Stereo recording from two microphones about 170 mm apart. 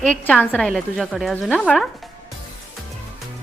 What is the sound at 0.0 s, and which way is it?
Speech, 5° left (ahead or behind).